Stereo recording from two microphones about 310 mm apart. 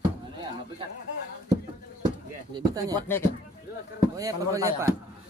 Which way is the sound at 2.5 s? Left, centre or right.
Centre.